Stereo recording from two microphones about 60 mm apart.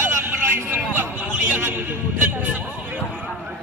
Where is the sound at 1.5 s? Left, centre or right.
Right.